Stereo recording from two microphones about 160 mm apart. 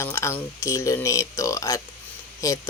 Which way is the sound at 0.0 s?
15° left (ahead or behind).